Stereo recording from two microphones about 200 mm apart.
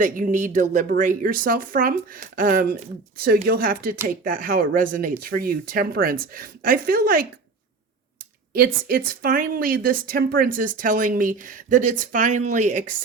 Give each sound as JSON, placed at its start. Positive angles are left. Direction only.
{"t": 0.0, "sound": "speech", "side_deg": -40}
{"t": 8.5, "sound": "speech", "side_deg": -45}